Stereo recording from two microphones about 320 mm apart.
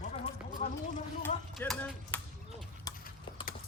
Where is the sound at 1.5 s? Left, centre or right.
Centre.